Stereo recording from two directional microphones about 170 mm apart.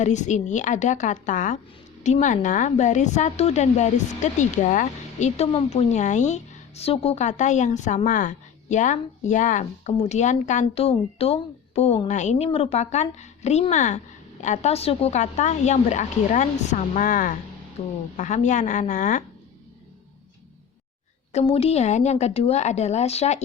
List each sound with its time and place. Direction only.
0.0 s speech: 45° left (ahead or behind)
17.8 s speech: 40° left (ahead or behind)
21.3 s speech: 35° left (ahead or behind)